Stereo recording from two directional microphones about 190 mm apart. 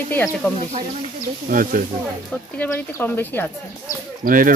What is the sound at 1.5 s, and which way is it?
Speech, 45° right (ahead or behind).